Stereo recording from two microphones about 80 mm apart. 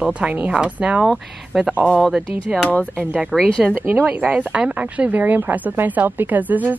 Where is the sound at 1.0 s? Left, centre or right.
Centre.